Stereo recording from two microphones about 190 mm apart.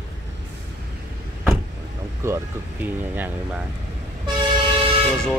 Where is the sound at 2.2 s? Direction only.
15° right (ahead or behind).